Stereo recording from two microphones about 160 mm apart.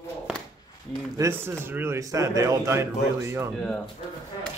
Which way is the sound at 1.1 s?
15° right (ahead or behind).